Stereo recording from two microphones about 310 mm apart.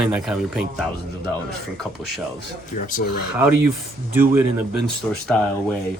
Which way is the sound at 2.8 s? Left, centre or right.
Left.